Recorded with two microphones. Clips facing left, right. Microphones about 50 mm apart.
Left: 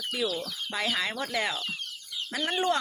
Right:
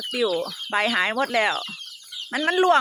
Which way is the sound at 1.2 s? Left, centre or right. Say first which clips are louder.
Right 8 dB; right.